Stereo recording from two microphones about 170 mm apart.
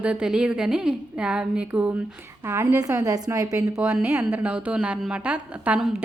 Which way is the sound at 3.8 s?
5° right (ahead or behind).